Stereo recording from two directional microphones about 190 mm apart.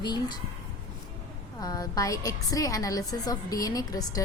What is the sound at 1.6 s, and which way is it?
A woman's voice, 20° left (ahead or behind).